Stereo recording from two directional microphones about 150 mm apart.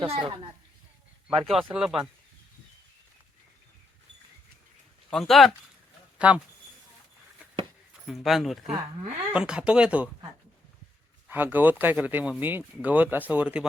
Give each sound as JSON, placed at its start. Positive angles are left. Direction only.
{"t": 0.0, "sound": "a woman's voice", "side_deg": -35}
{"t": 1.3, "sound": "speech", "side_deg": 0}
{"t": 5.1, "sound": "speech", "side_deg": 0}
{"t": 8.0, "sound": "speech", "side_deg": 0}
{"t": 11.3, "sound": "speech", "side_deg": -10}